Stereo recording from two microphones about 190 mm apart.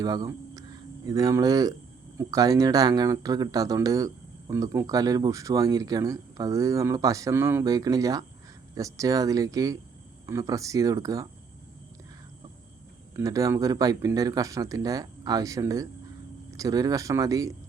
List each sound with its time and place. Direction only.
0.0 s speech: 20° right (ahead or behind)
13.1 s speech: 20° right (ahead or behind)